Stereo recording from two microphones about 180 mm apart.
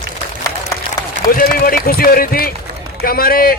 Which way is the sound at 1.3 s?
55° left (ahead or behind).